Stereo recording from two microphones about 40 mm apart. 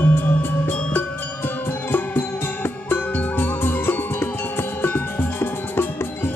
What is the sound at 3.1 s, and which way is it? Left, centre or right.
Music, left.